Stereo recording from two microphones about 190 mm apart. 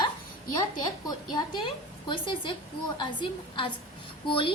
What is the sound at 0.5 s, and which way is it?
A woman's voice, 20° left (ahead or behind).